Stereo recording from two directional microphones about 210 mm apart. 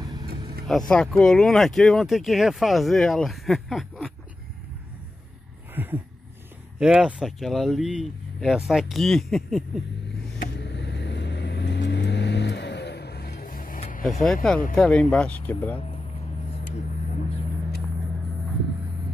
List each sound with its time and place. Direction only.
0.0 s vehicle: 20° right (ahead or behind)
0.7 s speech: centre (ahead or behind)
5.8 s a sound: 10° right (ahead or behind)
6.8 s speech: 5° right (ahead or behind)
10.5 s vehicle: 55° left (ahead or behind)
14.2 s speech: centre (ahead or behind)